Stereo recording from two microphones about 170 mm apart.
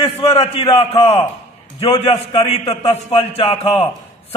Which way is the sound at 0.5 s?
35° left (ahead or behind).